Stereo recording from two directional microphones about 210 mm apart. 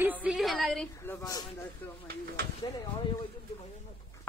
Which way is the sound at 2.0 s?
45° right (ahead or behind).